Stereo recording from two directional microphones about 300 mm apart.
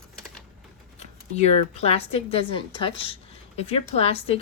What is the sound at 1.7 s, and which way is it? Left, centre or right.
A woman's voice, centre.